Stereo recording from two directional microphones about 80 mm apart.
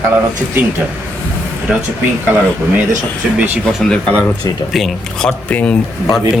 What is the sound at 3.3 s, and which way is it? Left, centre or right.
Speech, right.